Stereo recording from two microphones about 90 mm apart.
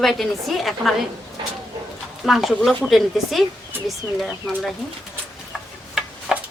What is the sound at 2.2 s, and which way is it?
A woman's voice, centre (ahead or behind).